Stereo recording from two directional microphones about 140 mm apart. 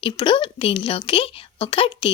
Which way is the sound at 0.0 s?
35° left (ahead or behind).